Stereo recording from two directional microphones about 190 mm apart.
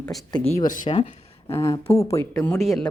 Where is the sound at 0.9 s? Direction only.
30° left (ahead or behind).